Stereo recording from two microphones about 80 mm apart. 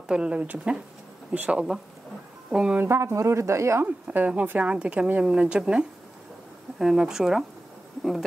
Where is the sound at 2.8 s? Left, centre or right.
Right.